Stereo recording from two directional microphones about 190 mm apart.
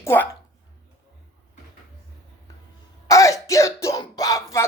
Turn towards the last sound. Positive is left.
turn(degrees=15)  # may be behind; listen again after turning